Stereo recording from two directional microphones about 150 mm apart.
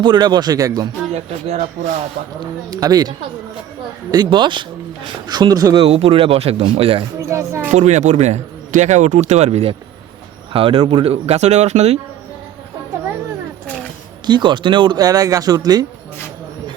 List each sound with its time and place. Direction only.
0.0 s speech: 30° right (ahead or behind)
1.1 s a man's voice: 45° right (ahead or behind)
2.6 s speech: 25° right (ahead or behind)
5.8 s speech: 40° right (ahead or behind)
7.2 s a sound: 20° right (ahead or behind)
7.7 s a man's voice: 50° right (ahead or behind)
14.3 s speech: 30° right (ahead or behind)